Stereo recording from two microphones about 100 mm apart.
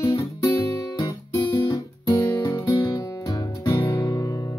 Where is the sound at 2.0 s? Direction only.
35° left (ahead or behind).